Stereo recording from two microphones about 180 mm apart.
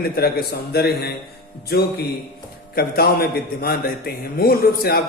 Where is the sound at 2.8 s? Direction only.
55° left (ahead or behind).